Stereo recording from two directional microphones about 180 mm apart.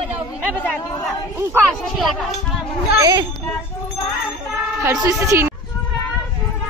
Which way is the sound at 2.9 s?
20° right (ahead or behind).